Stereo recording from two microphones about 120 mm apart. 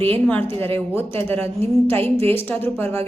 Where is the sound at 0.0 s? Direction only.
15° left (ahead or behind).